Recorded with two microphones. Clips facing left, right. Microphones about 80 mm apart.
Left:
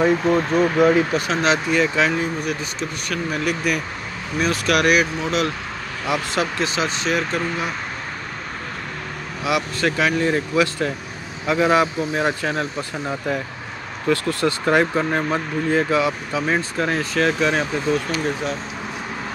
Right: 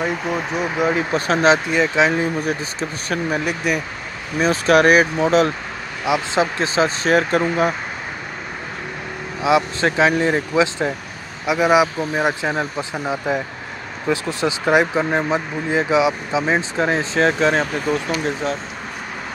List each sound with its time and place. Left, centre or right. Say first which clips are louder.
0.1 s speech: left 5 dB; centre
1.1 s speech: right 4 dB; right
2.4 s speech: right 2 dB; right
4.4 s speech: right 5 dB; right
9.4 s speech: right 4 dB; right
11.4 s speech: right 2 dB; centre
17.8 s speech: right 1 dB; centre